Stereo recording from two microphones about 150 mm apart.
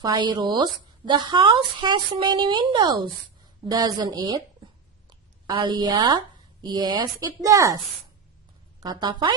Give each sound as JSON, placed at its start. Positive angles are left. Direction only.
{"t": 0.0, "sound": "a woman's voice", "side_deg": -25}
{"t": 5.5, "sound": "a woman's voice", "side_deg": -30}
{"t": 8.8, "sound": "a woman's voice", "side_deg": -30}